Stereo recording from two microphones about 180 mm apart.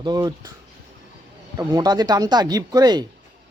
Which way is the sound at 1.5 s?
20° right (ahead or behind).